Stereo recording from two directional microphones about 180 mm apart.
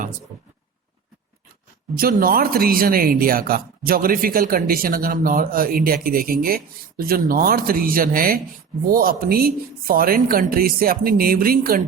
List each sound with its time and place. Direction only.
2.0 s speech: 55° right (ahead or behind)